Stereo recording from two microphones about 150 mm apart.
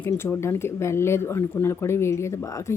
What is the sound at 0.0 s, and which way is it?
Speech, 15° left (ahead or behind).